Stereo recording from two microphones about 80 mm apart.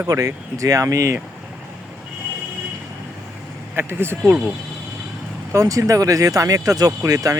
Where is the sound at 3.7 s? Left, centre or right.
Right.